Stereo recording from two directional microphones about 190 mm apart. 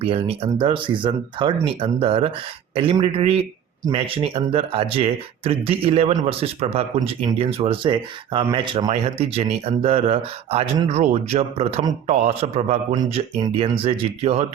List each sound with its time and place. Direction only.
0.0 s speech: 30° right (ahead or behind)